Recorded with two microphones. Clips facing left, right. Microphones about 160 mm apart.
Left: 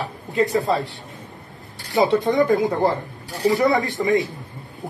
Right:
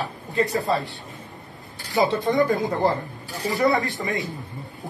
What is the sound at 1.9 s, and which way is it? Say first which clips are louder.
A man's voice: left 3 dB; 20° left (ahead or behind).